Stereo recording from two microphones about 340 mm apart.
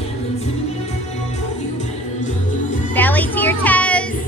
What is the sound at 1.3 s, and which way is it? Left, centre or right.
Music, left.